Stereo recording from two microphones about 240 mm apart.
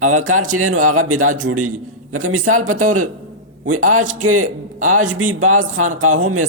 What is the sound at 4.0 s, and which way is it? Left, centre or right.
Speech, right.